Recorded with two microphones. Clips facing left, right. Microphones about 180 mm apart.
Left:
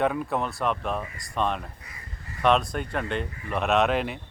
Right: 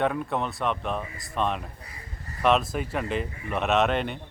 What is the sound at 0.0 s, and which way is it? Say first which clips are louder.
Speech: left 1 dB; centre (ahead or behind).